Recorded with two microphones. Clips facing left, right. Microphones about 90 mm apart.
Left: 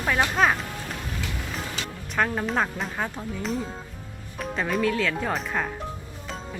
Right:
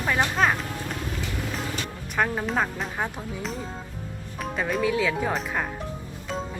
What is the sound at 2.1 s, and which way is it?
Speech, 5° right (ahead or behind).